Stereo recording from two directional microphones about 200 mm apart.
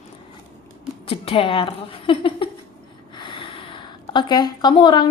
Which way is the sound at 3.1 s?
25° left (ahead or behind).